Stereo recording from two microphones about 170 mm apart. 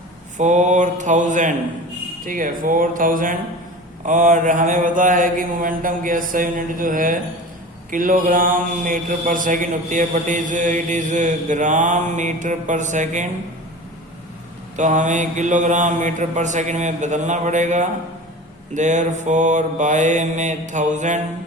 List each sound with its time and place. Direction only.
0.3 s mantra: 45° right (ahead or behind)
14.8 s mantra: 45° right (ahead or behind)